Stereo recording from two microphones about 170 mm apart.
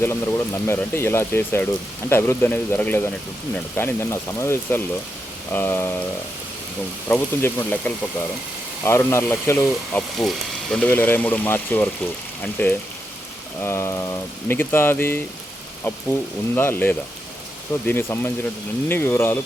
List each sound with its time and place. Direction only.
0.0 s speech: 15° left (ahead or behind)
7.1 s speech: 10° left (ahead or behind)
10.2 s speech: centre (ahead or behind)
16.6 s speech: 15° left (ahead or behind)